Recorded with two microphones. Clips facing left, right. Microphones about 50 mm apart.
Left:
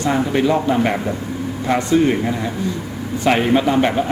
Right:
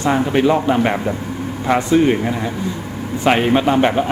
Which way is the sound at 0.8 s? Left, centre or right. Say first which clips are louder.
Right 1 dB; centre.